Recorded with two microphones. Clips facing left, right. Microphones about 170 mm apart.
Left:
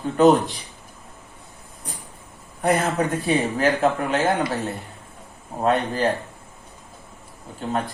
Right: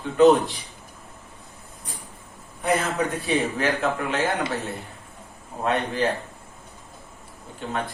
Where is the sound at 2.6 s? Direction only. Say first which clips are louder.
Left 3 dB; 40° left (ahead or behind).